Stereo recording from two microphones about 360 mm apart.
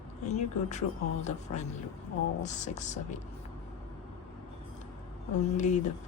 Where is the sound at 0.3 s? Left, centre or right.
Centre.